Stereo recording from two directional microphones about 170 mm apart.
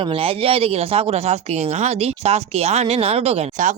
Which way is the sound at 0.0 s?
35° right (ahead or behind).